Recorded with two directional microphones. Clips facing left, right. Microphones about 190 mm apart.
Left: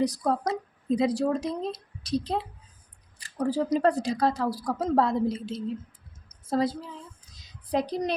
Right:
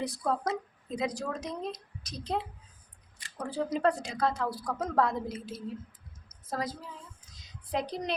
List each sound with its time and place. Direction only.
0.0 s speech: 40° left (ahead or behind)
6.2 s a sound: 30° left (ahead or behind)
7.7 s speech: 35° left (ahead or behind)